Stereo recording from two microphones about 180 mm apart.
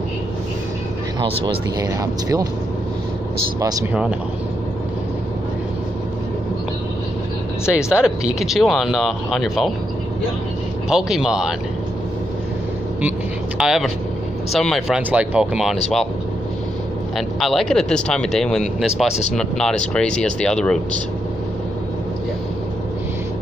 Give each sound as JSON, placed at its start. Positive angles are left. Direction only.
{"t": 1.2, "sound": "speech", "side_deg": -20}
{"t": 7.9, "sound": "speech", "side_deg": -5}
{"t": 10.9, "sound": "speech", "side_deg": -5}
{"t": 13.6, "sound": "speech", "side_deg": 0}
{"t": 17.4, "sound": "speech", "side_deg": 0}